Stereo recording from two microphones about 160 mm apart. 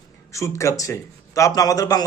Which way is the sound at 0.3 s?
20° left (ahead or behind).